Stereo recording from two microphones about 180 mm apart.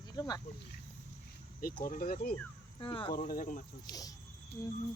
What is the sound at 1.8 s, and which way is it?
Speech, 50° left (ahead or behind).